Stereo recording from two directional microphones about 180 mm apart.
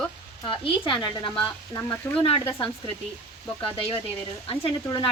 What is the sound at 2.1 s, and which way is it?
Speech, 30° left (ahead or behind).